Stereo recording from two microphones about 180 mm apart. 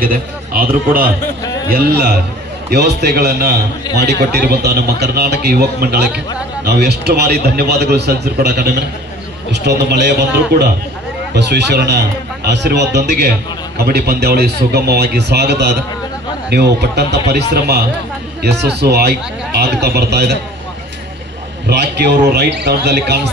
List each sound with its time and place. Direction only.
0.0 s a man's voice: 50° right (ahead or behind)
1.4 s a sound: 20° left (ahead or behind)
1.7 s a man's voice: 55° right (ahead or behind)
11.3 s a man's voice: 70° right (ahead or behind)
21.6 s a man's voice: 65° right (ahead or behind)